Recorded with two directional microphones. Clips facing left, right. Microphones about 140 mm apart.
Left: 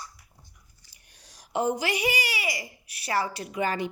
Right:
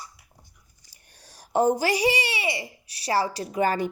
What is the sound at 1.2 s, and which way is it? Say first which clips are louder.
Speech: right 5 dB; 45° right (ahead or behind).